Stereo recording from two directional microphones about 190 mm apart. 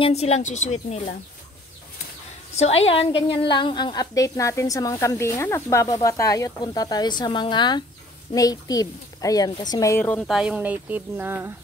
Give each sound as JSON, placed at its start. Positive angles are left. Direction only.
{"t": 0.0, "sound": "a woman's voice", "side_deg": 35}
{"t": 2.5, "sound": "a woman's voice", "side_deg": 35}